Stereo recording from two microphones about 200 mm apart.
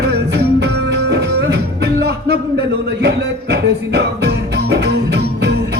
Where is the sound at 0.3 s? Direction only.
55° right (ahead or behind).